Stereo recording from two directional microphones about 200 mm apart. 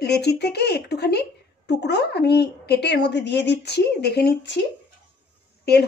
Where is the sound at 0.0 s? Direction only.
55° left (ahead or behind).